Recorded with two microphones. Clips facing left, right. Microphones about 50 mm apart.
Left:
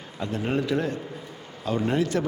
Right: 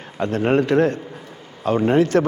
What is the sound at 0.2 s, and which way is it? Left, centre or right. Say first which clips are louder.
Speech: right 9 dB; right.